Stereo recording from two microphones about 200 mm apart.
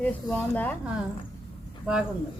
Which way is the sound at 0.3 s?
10° left (ahead or behind).